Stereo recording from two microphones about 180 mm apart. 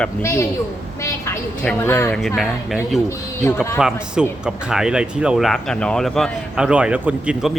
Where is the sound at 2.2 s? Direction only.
Centre (ahead or behind).